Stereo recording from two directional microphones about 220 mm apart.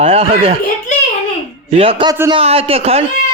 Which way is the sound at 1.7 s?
25° right (ahead or behind).